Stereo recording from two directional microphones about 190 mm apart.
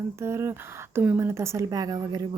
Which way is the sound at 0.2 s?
15° right (ahead or behind).